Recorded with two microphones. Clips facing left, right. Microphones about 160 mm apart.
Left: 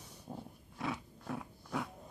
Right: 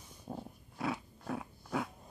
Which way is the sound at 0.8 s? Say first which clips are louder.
Right 2 dB; 5° right (ahead or behind).